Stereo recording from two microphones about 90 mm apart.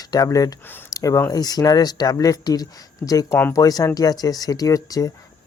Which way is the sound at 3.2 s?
20° left (ahead or behind).